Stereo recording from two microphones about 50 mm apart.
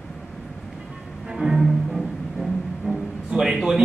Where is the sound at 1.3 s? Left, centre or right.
Centre.